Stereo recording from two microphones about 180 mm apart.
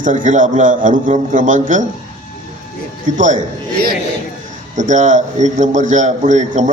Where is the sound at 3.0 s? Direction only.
45° right (ahead or behind).